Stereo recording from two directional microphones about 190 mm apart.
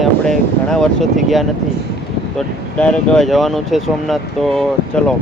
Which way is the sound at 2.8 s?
5° left (ahead or behind).